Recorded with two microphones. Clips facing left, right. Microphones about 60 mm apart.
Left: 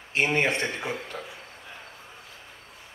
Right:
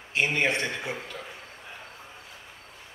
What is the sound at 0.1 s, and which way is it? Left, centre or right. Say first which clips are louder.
Speech: left 1 dB; left.